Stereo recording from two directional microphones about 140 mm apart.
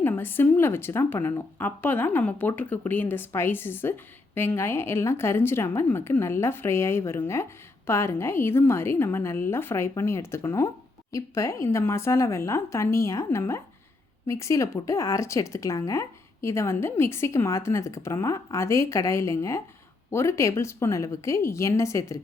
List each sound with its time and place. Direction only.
0.0 s a woman's voice: 15° left (ahead or behind)